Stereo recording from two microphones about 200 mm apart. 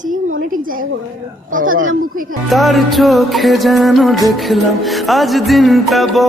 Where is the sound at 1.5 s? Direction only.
40° right (ahead or behind).